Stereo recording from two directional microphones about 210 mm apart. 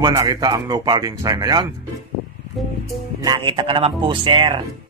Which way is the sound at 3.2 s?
20° right (ahead or behind).